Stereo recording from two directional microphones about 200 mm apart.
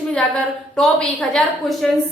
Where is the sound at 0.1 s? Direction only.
5° left (ahead or behind).